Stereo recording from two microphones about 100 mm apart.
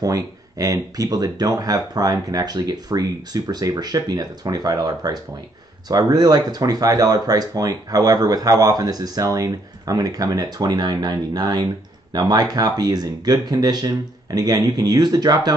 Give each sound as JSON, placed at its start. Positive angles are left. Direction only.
{"t": 0.0, "sound": "speech", "side_deg": -35}